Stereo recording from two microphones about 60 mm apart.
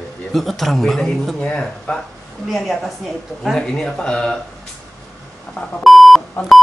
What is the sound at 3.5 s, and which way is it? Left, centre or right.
Speech, centre.